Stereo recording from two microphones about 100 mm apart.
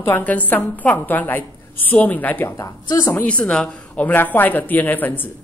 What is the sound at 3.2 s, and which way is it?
Speech, 10° left (ahead or behind).